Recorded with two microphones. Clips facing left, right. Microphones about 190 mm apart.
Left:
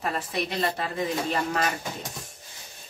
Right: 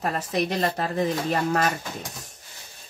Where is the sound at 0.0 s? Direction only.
45° right (ahead or behind).